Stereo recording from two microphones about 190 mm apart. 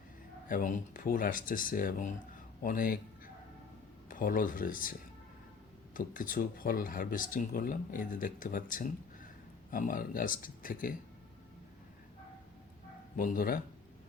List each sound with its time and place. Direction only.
0.4 s speech: 45° left (ahead or behind)
4.1 s speech: 45° left (ahead or behind)
13.1 s speech: 45° left (ahead or behind)